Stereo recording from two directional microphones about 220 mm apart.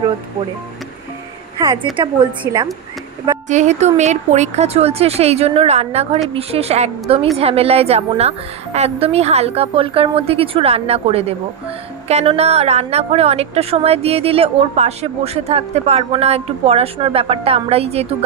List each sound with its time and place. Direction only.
1.6 s a woman's voice: 15° right (ahead or behind)
3.4 s a woman's voice: 30° right (ahead or behind)